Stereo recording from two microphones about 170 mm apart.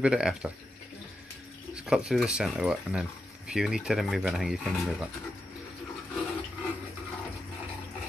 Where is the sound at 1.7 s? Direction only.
5° right (ahead or behind).